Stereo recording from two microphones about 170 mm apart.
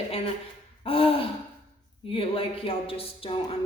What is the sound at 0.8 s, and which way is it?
Gasp, 35° left (ahead or behind).